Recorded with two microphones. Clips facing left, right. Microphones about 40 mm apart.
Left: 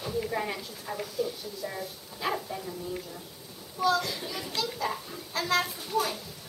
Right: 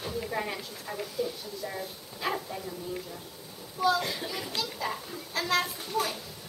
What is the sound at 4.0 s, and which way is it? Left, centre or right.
Speech, centre.